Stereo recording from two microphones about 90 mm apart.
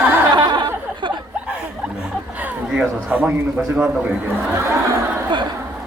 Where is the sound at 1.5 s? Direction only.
15° right (ahead or behind).